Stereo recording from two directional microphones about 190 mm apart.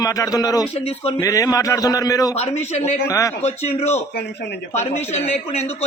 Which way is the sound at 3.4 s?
35° left (ahead or behind).